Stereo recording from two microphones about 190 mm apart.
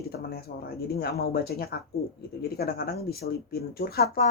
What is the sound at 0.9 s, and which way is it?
Speech, 55° left (ahead or behind).